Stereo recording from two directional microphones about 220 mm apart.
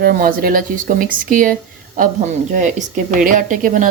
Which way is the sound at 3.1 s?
40° right (ahead or behind).